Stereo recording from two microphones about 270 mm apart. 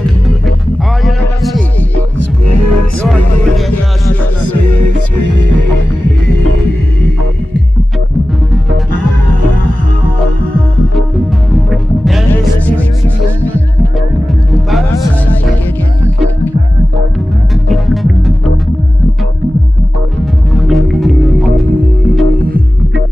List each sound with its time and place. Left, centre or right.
1.0 s music: centre
2.1 s music: right
4.4 s music: right
11.5 s music: centre
17.6 s music: centre
20.5 s music: centre
22.4 s music: right